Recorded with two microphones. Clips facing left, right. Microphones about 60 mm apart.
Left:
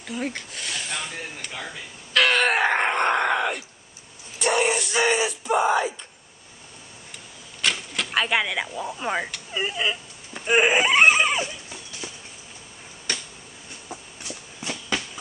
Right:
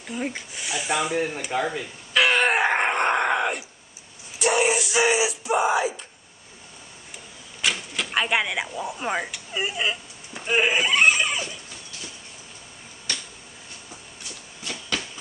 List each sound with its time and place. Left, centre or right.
0.0 s speech: centre
1.5 s speech: right
2.1 s groan: centre
4.4 s speech: centre
7.6 s speech: centre
10.4 s speech: centre
10.7 s a sound: left
14.6 s a sound: centre